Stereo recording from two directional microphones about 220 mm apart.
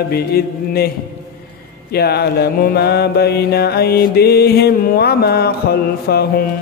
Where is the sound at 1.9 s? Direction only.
45° left (ahead or behind).